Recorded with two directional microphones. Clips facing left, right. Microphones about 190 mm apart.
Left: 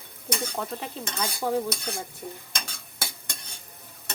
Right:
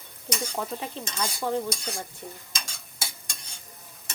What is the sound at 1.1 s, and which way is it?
Speech, 5° left (ahead or behind).